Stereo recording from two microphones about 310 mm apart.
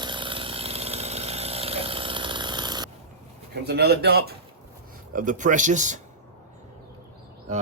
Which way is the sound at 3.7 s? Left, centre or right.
Right.